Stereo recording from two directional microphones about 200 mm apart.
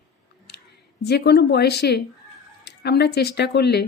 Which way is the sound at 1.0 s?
55° left (ahead or behind).